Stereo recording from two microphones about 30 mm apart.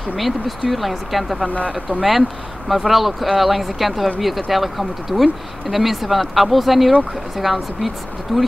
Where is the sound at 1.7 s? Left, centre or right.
Right.